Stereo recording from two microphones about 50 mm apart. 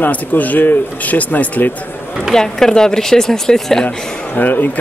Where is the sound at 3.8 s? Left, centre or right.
Left.